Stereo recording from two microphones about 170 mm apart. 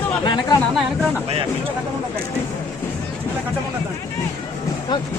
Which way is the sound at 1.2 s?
35° right (ahead or behind).